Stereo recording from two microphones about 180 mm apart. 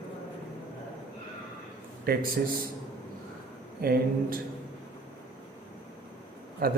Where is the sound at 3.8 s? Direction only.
55° right (ahead or behind).